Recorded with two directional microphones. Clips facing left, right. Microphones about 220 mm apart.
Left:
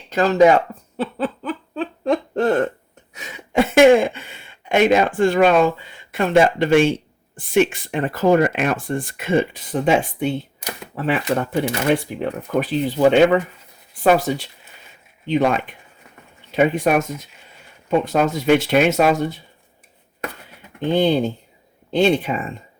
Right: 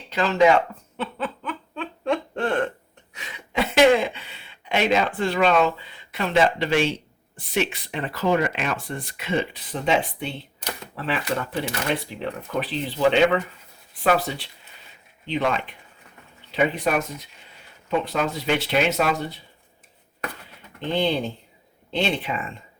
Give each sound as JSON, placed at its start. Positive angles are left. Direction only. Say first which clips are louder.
{"t": 0.1, "sound": "a sound", "louder": "left 5 dB", "side_deg": 40}
{"t": 3.2, "sound": "speech", "louder": "left 7 dB", "side_deg": 45}
{"t": 20.9, "sound": "speech", "louder": "left 6 dB", "side_deg": 45}